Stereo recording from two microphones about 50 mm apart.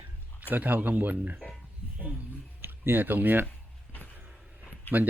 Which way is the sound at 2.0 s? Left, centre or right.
Right.